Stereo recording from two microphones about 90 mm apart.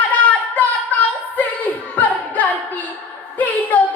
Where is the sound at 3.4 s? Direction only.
20° left (ahead or behind).